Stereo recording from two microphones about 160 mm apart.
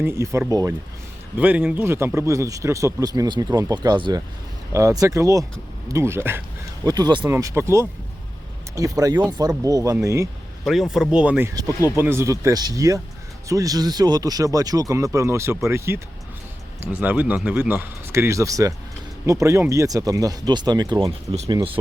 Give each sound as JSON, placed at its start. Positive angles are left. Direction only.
{"t": 0.0, "sound": "a man's voice", "side_deg": -15}
{"t": 6.8, "sound": "a man's voice", "side_deg": -25}
{"t": 7.3, "sound": "a man's voice", "side_deg": -20}
{"t": 10.6, "sound": "a man's voice", "side_deg": 0}